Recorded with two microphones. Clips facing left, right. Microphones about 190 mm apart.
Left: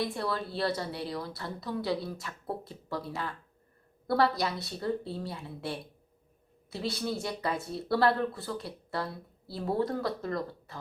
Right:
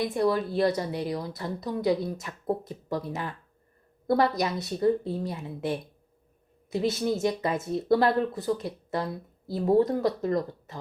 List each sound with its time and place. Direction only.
0.0 s a woman's voice: 20° right (ahead or behind)